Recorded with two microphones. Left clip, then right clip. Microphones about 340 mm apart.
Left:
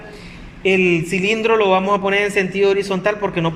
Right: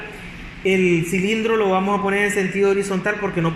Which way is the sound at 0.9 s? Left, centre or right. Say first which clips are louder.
Left 2 dB; left.